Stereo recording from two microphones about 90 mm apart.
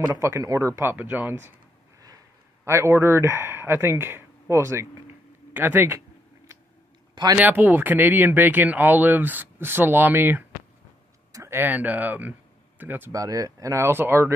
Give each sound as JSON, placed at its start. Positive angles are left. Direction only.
{"t": 0.0, "sound": "speech", "side_deg": -35}
{"t": 2.6, "sound": "speech", "side_deg": -30}
{"t": 5.5, "sound": "speech", "side_deg": -20}
{"t": 5.9, "sound": "a sound", "side_deg": -35}
{"t": 7.3, "sound": "speech", "side_deg": -20}
{"t": 11.3, "sound": "a sound", "side_deg": -30}
{"t": 11.6, "sound": "speech", "side_deg": -20}
{"t": 13.1, "sound": "speech", "side_deg": -40}